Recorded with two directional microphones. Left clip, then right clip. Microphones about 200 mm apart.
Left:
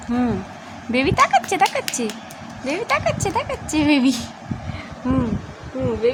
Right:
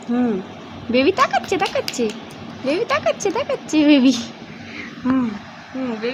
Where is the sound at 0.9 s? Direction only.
20° left (ahead or behind).